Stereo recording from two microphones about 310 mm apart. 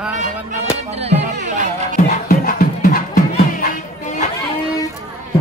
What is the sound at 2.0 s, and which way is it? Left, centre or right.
Music, left.